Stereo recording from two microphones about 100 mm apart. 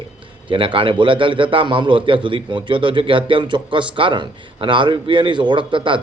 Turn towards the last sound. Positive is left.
turn(degrees=-55)  # may be behind; listen again after turning